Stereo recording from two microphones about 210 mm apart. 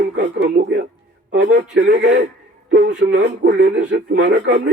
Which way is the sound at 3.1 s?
55° right (ahead or behind).